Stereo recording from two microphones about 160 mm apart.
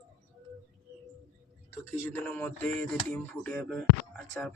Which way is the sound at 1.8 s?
10° left (ahead or behind).